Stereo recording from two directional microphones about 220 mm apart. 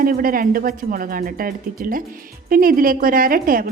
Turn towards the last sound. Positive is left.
turn(degrees=-40)  # may be behind; listen again after turning